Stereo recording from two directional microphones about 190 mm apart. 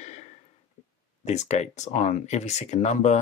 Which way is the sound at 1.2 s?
35° left (ahead or behind).